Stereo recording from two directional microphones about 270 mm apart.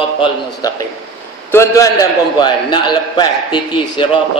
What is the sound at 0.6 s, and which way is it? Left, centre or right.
A man's voice, centre.